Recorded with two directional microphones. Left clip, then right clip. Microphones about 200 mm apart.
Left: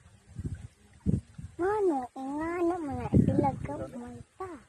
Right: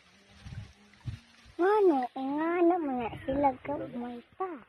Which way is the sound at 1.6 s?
30° right (ahead or behind).